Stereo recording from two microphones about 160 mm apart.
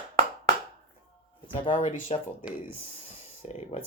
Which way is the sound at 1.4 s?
30° left (ahead or behind).